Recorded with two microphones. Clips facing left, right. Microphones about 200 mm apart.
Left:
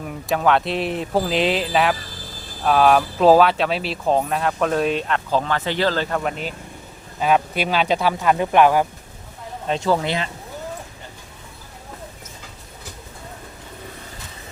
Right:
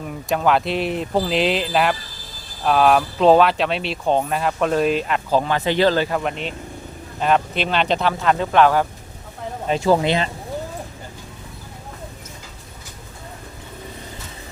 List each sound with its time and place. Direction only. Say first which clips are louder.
0.0 s speech: even; centre (ahead or behind)
9.6 s speech: right 2 dB; 5° right (ahead or behind)
9.9 s speech: right 4 dB; 20° right (ahead or behind)